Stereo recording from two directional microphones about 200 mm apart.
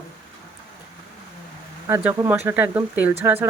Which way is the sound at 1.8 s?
10° right (ahead or behind).